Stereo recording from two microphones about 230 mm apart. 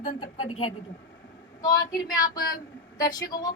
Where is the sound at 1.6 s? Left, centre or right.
Centre.